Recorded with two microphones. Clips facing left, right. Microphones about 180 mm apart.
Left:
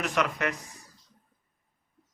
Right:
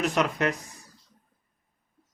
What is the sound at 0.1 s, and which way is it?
Speech, 30° right (ahead or behind).